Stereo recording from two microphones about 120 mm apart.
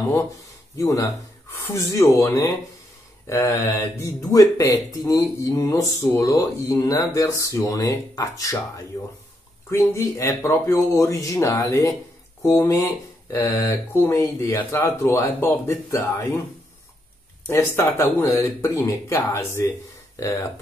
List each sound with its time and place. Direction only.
0.7 s speech: 25° left (ahead or behind)
17.5 s speech: 25° left (ahead or behind)